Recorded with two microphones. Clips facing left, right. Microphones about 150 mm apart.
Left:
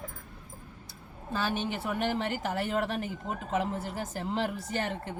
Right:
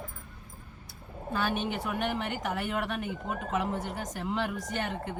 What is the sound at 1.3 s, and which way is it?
A woman's voice, 30° left (ahead or behind).